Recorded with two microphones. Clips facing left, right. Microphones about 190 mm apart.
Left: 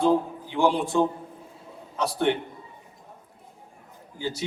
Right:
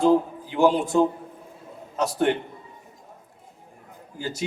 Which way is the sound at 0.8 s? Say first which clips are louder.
Right 2 dB; 45° right (ahead or behind).